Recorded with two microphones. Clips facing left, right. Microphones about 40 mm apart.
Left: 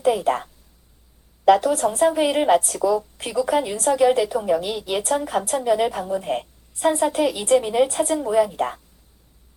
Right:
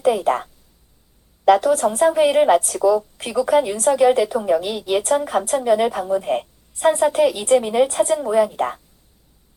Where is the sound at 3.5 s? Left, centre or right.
Centre.